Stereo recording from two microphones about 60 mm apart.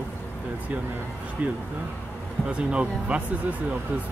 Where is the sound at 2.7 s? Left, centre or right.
Right.